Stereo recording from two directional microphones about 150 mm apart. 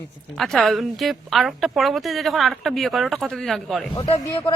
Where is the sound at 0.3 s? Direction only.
Centre (ahead or behind).